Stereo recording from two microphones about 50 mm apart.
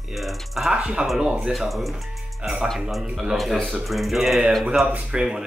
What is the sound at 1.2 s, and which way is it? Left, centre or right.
Speech, centre.